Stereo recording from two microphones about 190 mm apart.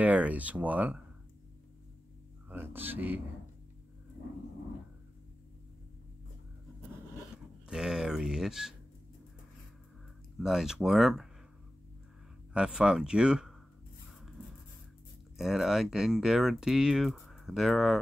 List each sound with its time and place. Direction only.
0.0 s speech: 10° right (ahead or behind)
2.5 s speech: 10° right (ahead or behind)
7.6 s speech: 5° right (ahead or behind)
10.4 s speech: 5° right (ahead or behind)
12.5 s speech: 5° right (ahead or behind)
15.3 s speech: centre (ahead or behind)